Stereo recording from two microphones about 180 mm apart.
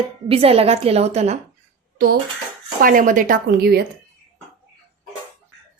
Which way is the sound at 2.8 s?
50° right (ahead or behind).